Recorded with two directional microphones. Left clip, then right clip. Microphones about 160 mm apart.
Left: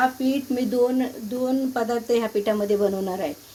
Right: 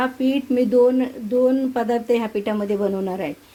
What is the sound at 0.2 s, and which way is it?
Speech, 55° right (ahead or behind).